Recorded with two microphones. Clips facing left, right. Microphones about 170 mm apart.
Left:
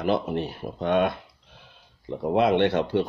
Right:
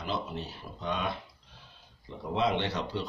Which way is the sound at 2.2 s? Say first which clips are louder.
Left 9 dB; 55° left (ahead or behind).